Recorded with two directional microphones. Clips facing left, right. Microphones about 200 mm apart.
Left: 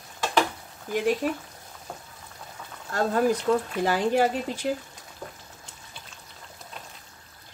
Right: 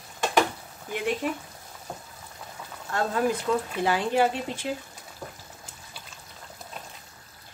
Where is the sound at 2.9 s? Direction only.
40° left (ahead or behind).